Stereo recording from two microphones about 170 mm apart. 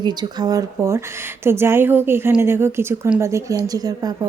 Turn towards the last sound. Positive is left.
turn(degrees=-20)  # may be behind; listen again after turning